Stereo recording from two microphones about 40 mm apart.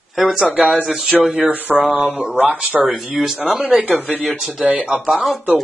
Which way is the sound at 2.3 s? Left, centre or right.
Right.